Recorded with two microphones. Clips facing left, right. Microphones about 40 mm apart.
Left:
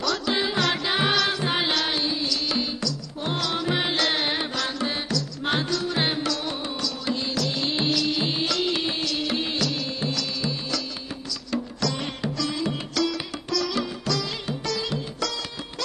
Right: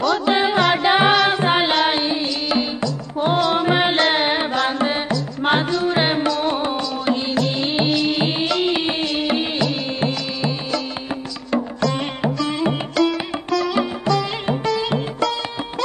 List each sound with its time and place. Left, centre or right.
0.0 s music: right
11.5 s sitar: right
14.7 s music: right